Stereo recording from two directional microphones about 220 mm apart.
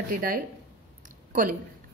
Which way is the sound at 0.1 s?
40° right (ahead or behind).